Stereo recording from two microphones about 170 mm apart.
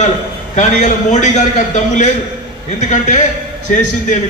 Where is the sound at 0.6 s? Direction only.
45° left (ahead or behind).